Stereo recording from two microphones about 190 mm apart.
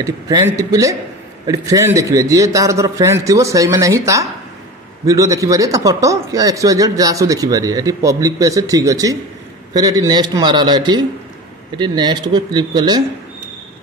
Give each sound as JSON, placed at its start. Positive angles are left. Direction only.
{"t": 0.0, "sound": "a man's voice", "side_deg": -15}